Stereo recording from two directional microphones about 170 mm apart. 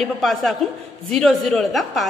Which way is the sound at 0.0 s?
Centre (ahead or behind).